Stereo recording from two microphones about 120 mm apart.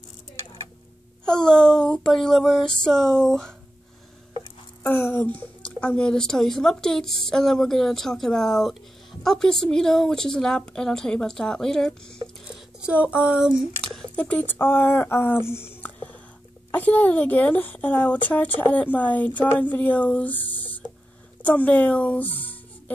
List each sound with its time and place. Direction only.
1.2 s a woman's voice: 5° left (ahead or behind)
4.8 s a woman's voice: 20° left (ahead or behind)
12.5 s speech: 10° right (ahead or behind)
13.9 s speech: 10° left (ahead or behind)
21.4 s a sound: 10° left (ahead or behind)